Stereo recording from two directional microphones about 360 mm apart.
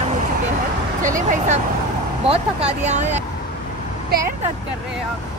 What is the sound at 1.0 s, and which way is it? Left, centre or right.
Speech, right.